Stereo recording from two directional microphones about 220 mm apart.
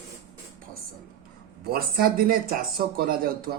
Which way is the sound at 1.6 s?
45° right (ahead or behind).